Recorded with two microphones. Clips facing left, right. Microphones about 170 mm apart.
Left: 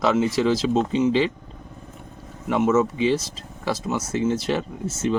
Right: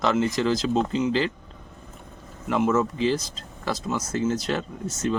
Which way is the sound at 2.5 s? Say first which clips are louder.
Left 3 dB; 5° left (ahead or behind).